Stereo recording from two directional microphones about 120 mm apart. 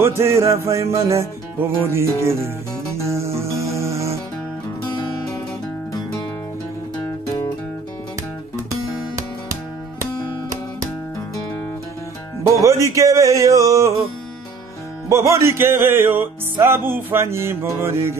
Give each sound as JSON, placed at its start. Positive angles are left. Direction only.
{"t": 0.0, "sound": "music", "side_deg": -20}
{"t": 8.5, "sound": "music", "side_deg": -30}
{"t": 12.6, "sound": "music", "side_deg": -25}
{"t": 15.0, "sound": "music", "side_deg": -25}